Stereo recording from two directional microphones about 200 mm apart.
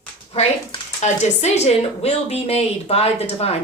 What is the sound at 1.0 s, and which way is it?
Speech, 35° left (ahead or behind).